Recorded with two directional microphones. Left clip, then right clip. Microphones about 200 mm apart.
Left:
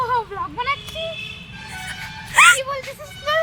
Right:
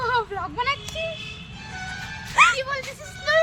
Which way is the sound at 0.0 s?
10° right (ahead or behind).